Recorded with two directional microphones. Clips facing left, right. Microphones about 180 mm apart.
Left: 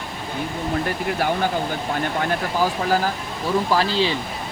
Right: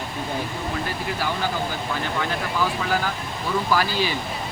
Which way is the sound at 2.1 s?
40° left (ahead or behind).